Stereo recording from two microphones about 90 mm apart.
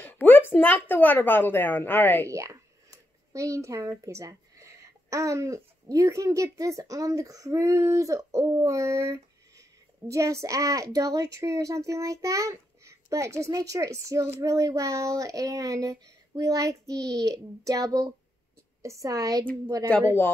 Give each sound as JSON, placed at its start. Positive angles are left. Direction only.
{"t": 0.0, "sound": "a woman's voice", "side_deg": 20}
{"t": 2.2, "sound": "speech", "side_deg": -35}